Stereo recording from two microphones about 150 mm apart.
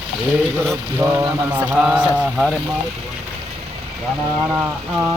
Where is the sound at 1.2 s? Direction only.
5° right (ahead or behind).